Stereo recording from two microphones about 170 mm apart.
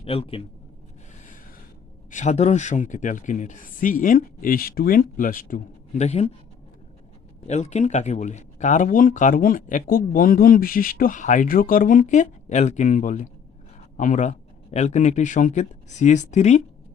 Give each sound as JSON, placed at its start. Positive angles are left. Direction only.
{"t": 0.0, "sound": "a man's voice", "side_deg": 35}
{"t": 2.0, "sound": "speech", "side_deg": 45}
{"t": 7.4, "sound": "speech", "side_deg": 40}